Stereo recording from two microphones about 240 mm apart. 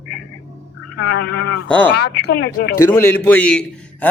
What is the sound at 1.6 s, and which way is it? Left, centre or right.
Speech, centre.